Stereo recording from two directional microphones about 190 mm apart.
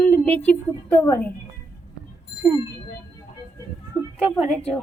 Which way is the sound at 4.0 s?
10° left (ahead or behind).